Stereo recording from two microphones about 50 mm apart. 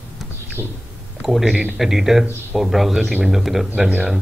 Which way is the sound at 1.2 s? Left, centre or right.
Centre.